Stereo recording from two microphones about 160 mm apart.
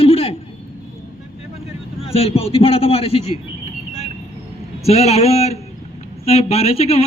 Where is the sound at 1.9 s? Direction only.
35° left (ahead or behind).